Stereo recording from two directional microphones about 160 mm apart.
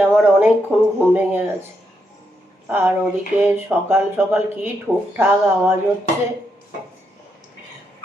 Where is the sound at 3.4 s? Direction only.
15° right (ahead or behind).